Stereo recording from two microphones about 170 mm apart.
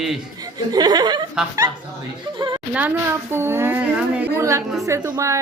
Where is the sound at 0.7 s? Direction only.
25° right (ahead or behind).